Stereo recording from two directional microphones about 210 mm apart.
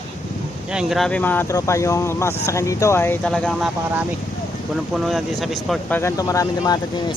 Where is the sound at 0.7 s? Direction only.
Centre (ahead or behind).